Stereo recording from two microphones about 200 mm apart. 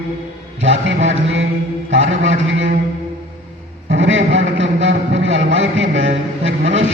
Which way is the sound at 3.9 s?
70° right (ahead or behind).